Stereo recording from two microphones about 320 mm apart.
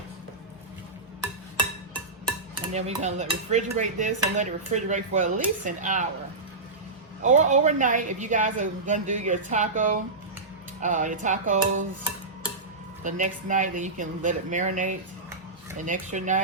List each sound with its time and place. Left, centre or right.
2.7 s speech: right
7.2 s speech: right
13.1 s speech: right